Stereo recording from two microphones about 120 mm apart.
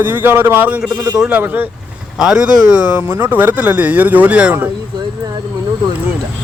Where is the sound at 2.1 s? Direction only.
5° right (ahead or behind).